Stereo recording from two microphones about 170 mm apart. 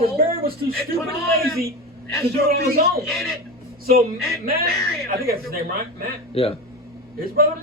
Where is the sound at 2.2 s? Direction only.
60° right (ahead or behind).